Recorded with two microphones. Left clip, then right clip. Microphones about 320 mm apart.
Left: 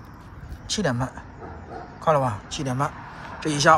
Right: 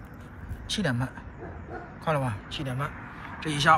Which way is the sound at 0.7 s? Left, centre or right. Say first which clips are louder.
Left 4 dB; centre.